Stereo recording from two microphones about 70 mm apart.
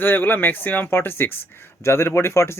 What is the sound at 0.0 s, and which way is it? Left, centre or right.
Speech, left.